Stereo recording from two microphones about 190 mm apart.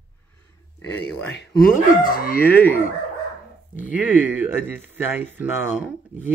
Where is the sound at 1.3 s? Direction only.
55° left (ahead or behind).